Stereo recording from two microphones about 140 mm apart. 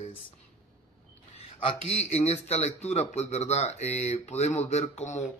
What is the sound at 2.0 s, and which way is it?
Speech, 50° left (ahead or behind).